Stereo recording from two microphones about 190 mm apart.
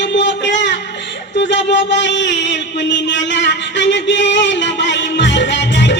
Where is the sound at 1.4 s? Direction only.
70° left (ahead or behind).